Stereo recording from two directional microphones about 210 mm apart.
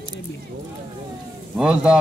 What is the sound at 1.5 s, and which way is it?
Speech, 5° right (ahead or behind).